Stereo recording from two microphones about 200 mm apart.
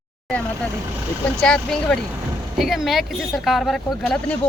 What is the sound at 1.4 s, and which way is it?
Speech, 5° left (ahead or behind).